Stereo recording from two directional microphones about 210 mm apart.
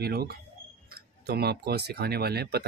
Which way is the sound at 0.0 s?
50° right (ahead or behind).